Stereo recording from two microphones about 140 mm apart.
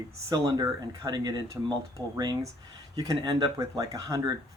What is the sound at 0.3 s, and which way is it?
Speech, 25° right (ahead or behind).